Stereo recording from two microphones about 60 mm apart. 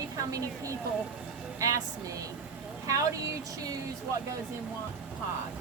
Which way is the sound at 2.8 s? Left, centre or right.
Right.